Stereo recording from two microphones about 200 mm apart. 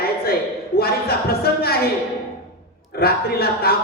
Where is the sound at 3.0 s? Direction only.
50° left (ahead or behind).